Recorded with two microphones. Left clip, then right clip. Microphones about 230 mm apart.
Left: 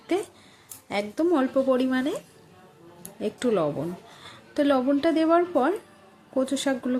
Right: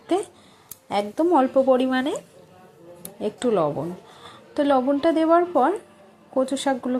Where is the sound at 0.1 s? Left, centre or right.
Centre.